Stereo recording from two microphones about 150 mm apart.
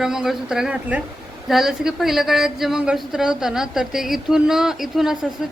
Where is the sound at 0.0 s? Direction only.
5° right (ahead or behind).